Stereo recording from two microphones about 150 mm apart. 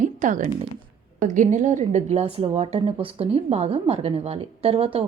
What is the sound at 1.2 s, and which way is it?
Speech, 55° right (ahead or behind).